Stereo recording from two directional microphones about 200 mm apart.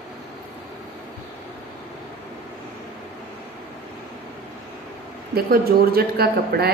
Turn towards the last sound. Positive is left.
turn(degrees=-50)  # may be behind; listen again after turning